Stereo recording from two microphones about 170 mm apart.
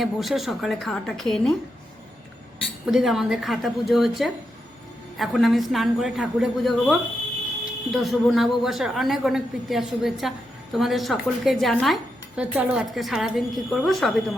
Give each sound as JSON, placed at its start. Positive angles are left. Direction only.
{"t": 0.0, "sound": "a woman's voice", "side_deg": 0}
{"t": 2.8, "sound": "a woman's voice", "side_deg": -5}